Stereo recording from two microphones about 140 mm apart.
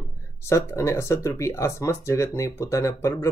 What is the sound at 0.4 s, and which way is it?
Speech, 20° left (ahead or behind).